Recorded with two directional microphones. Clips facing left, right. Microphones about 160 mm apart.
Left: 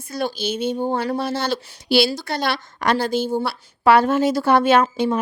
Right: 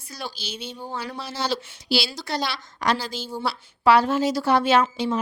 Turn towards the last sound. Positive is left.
turn(degrees=55)  # may be behind; listen again after turning